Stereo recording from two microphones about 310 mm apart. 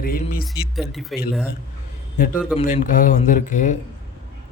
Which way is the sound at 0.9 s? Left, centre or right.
Centre.